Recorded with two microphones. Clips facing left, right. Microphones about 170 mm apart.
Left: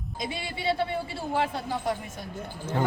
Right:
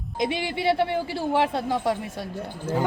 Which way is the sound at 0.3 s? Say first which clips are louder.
Right 4 dB; 75° right (ahead or behind).